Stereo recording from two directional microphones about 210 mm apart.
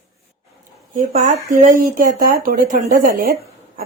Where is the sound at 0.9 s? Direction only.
35° right (ahead or behind).